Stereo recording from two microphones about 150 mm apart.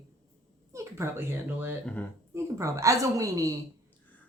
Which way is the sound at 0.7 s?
20° right (ahead or behind).